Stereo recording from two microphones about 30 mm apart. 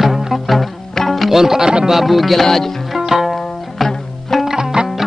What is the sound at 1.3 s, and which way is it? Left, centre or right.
Speech, centre.